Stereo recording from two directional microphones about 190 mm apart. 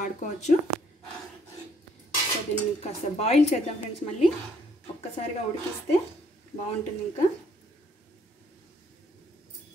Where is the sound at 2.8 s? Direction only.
35° left (ahead or behind).